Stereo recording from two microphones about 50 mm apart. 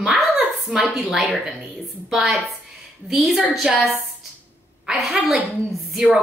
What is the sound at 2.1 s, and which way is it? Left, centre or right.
A woman's voice, centre.